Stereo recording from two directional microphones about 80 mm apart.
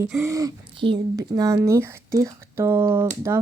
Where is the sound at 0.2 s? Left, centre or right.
Right.